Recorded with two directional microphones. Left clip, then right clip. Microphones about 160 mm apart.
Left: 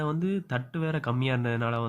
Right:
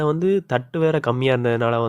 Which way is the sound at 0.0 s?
35° right (ahead or behind).